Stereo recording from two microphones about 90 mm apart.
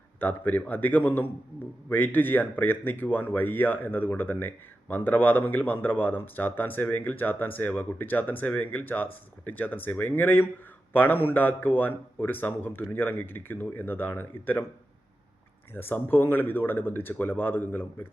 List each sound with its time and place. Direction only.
0.2 s speech: 20° left (ahead or behind)
15.7 s speech: 25° left (ahead or behind)